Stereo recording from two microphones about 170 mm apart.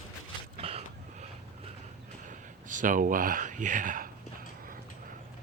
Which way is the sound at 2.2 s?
50° right (ahead or behind).